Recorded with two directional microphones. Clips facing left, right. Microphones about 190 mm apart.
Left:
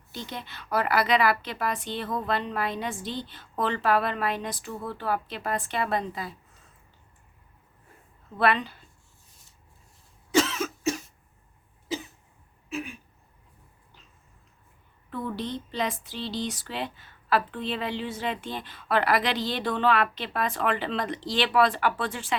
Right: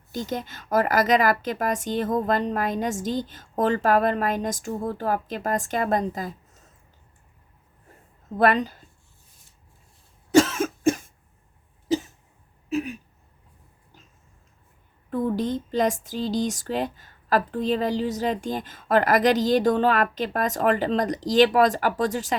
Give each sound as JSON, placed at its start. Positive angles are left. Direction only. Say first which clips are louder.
{"t": 0.1, "sound": "speech", "louder": "right 8 dB", "side_deg": -45}
{"t": 8.4, "sound": "speech", "louder": "right 4 dB", "side_deg": -45}
{"t": 10.3, "sound": "cough", "louder": "right 6 dB", "side_deg": -50}
{"t": 12.7, "sound": "a sound", "louder": "right 8 dB", "side_deg": -40}
{"t": 15.1, "sound": "speech", "louder": "right 7 dB", "side_deg": -45}